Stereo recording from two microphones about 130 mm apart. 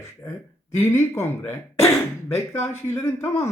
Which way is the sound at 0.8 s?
20° left (ahead or behind).